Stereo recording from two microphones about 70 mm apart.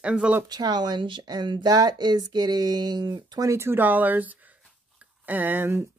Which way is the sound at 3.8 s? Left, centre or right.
Right.